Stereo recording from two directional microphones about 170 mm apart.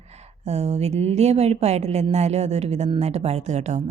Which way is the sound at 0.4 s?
40° right (ahead or behind).